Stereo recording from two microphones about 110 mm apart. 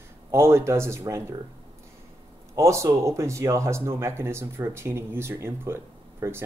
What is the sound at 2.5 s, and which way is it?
Speech, 25° right (ahead or behind).